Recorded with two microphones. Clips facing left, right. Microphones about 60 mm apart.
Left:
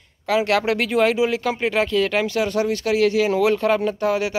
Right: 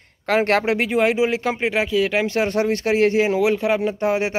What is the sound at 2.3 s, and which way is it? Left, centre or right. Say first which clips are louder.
Speech: right 1 dB; right.